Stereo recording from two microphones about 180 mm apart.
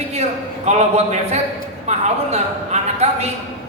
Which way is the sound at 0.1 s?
35° right (ahead or behind).